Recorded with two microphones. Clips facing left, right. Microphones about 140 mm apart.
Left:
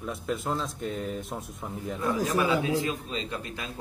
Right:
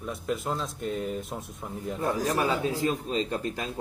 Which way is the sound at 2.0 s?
35° right (ahead or behind).